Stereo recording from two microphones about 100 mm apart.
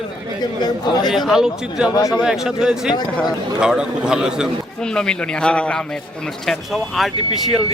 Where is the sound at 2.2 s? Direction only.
5° right (ahead or behind).